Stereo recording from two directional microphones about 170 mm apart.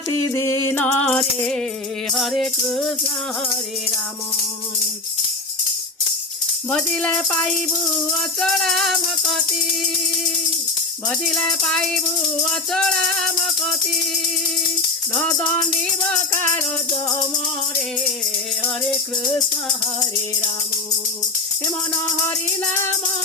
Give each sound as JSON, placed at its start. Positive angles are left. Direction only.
{"t": 0.3, "sound": "music", "side_deg": 15}
{"t": 6.7, "sound": "music", "side_deg": 5}
{"t": 11.1, "sound": "music", "side_deg": 5}